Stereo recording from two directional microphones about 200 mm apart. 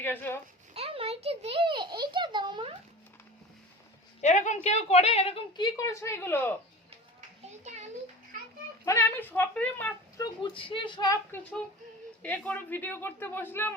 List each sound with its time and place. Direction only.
0.0 s speech: 10° left (ahead or behind)
0.7 s a sound: 30° right (ahead or behind)
4.2 s a woman's voice: 35° left (ahead or behind)
5.7 s speech: 15° left (ahead or behind)
7.6 s a sound: 35° right (ahead or behind)
8.8 s speech: 15° left (ahead or behind)
10.4 s a woman's voice: 25° left (ahead or behind)
12.2 s speech: 5° left (ahead or behind)